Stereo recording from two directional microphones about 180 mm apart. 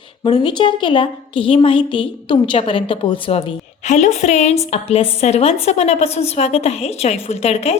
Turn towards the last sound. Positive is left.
turn(degrees=35)  # may be behind; listen again after turning